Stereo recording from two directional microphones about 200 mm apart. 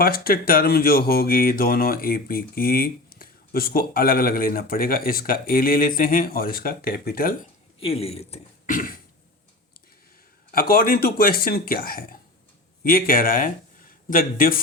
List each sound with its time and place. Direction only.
0.0 s speech: 50° left (ahead or behind)
7.8 s speech: 30° left (ahead or behind)
10.5 s speech: 45° left (ahead or behind)